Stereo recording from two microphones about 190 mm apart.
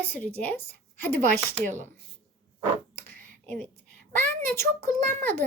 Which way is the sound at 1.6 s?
40° right (ahead or behind).